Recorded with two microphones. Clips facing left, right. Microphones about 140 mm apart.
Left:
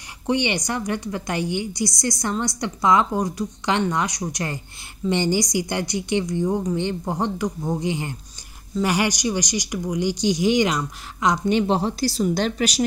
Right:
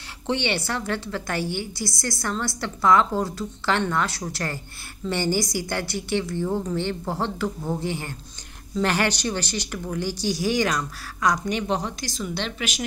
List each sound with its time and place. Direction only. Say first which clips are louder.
0.3 s a woman's voice: left 3 dB; 15° left (ahead or behind)
11.4 s a woman's voice: left 6 dB; 30° left (ahead or behind)